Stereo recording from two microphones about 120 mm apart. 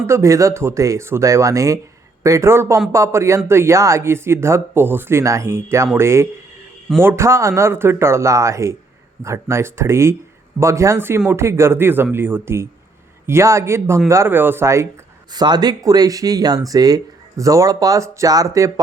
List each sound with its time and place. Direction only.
0.1 s speech: 25° right (ahead or behind)
15.3 s speech: 35° right (ahead or behind)